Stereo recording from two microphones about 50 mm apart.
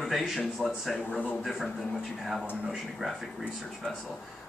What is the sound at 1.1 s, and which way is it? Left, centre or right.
Speech, left.